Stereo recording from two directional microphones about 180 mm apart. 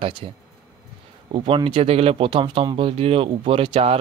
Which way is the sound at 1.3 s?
30° right (ahead or behind).